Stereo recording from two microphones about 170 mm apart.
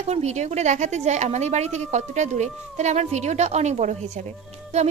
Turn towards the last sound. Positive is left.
turn(degrees=-35)  # may be behind; listen again after turning